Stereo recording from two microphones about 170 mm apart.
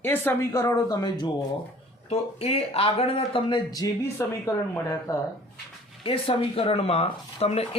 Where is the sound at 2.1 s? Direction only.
35° left (ahead or behind); by 5.2 s 20° left (ahead or behind).